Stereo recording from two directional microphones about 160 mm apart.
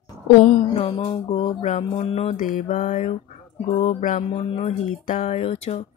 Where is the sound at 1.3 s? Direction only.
50° left (ahead or behind).